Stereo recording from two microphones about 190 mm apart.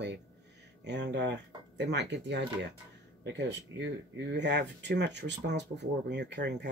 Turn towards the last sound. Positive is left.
turn(degrees=-65)  # may be behind; listen again after turning